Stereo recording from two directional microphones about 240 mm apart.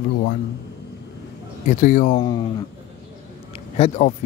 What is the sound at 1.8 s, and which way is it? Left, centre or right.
Speech, left.